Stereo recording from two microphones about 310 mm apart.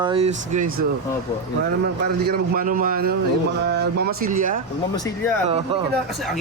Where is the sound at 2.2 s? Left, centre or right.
Right.